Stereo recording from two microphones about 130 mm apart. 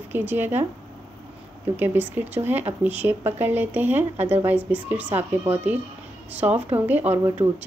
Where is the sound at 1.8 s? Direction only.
15° right (ahead or behind).